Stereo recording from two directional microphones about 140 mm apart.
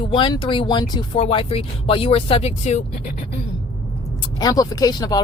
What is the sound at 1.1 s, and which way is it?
Speech, 40° left (ahead or behind).